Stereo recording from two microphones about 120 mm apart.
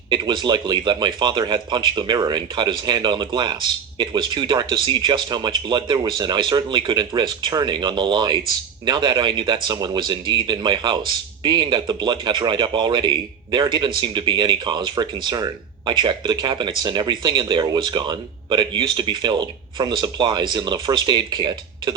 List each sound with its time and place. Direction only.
0.1 s speech: 40° right (ahead or behind)